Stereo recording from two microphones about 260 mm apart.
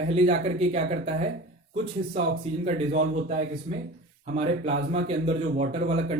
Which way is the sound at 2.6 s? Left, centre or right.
Right.